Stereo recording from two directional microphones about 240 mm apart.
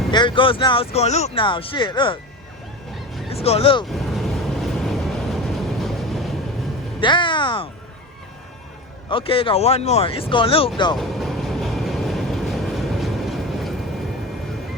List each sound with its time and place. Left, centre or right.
0.1 s speech: centre
3.2 s speech: left
3.8 s vehicle: centre
7.0 s speech: left
9.0 s speech: left
10.9 s vehicle: centre